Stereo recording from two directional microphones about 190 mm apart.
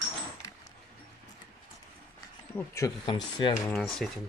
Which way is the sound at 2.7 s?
20° left (ahead or behind).